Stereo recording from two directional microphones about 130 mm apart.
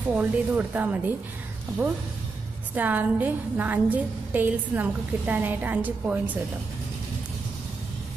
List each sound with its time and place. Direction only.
0.1 s a woman's voice: 10° right (ahead or behind)
2.7 s a woman's voice: 15° right (ahead or behind)